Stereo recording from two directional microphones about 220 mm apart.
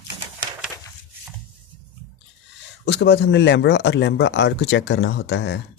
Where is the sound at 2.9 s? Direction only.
50° left (ahead or behind).